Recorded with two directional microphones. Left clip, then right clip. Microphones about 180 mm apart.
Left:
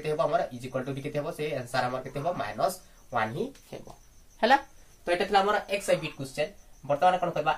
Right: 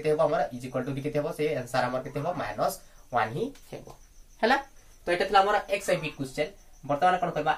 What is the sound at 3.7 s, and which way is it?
Speech, 30° left (ahead or behind).